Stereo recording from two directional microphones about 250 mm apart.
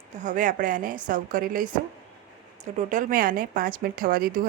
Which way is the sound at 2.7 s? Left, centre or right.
Right.